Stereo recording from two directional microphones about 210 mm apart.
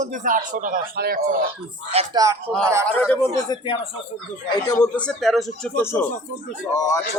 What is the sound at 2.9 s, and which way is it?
Speech, 10° left (ahead or behind).